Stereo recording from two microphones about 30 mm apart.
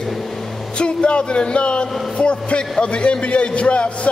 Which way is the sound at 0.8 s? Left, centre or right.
Left.